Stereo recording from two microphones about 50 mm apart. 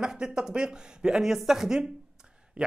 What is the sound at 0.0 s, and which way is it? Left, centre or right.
Speech, centre.